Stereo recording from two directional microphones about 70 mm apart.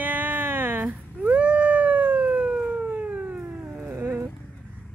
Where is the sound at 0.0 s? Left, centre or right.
Right.